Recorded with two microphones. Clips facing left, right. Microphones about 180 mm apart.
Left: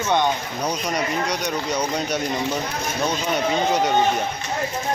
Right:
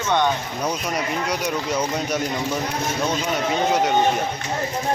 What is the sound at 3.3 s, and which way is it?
Speech, centre (ahead or behind).